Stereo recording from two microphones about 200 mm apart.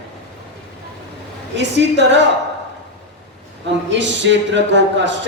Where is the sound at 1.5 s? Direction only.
60° right (ahead or behind).